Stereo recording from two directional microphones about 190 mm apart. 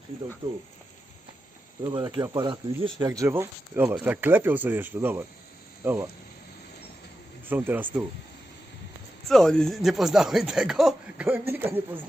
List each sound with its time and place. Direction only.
1.8 s speech: 20° right (ahead or behind)
7.5 s speech: 10° right (ahead or behind)
9.2 s speech: centre (ahead or behind)